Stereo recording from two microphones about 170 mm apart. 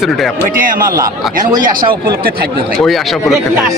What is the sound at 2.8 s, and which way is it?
Speech, centre (ahead or behind).